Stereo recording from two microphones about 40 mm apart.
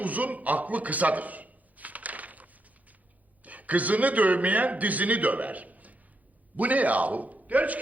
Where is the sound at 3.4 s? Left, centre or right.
Right.